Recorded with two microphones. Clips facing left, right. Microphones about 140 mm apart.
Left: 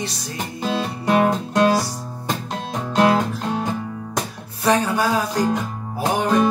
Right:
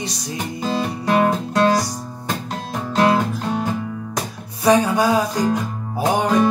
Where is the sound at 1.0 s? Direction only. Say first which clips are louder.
Even; 5° left (ahead or behind).